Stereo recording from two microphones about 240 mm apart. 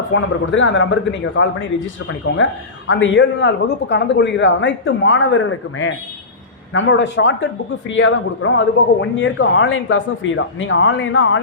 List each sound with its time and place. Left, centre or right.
0.1 s a man's voice: left